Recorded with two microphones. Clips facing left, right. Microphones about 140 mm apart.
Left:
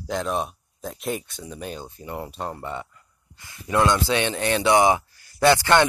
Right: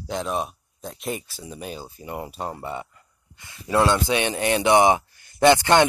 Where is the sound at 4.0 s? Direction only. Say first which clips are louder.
Even; 15° right (ahead or behind).